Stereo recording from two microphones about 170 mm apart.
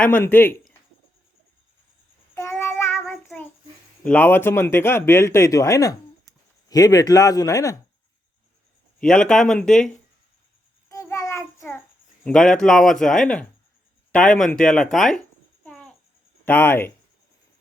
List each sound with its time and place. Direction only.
0.0 s speech: 10° left (ahead or behind)
2.3 s child singing: 15° left (ahead or behind)
4.0 s speech: 10° left (ahead or behind)
9.0 s speech: 5° left (ahead or behind)
10.8 s child singing: 15° left (ahead or behind)
12.2 s speech: 5° left (ahead or behind)
15.6 s babbling: 5° left (ahead or behind)
16.5 s speech: 15° left (ahead or behind)